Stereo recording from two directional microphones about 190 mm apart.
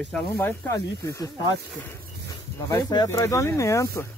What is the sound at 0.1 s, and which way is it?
Speech, 10° left (ahead or behind).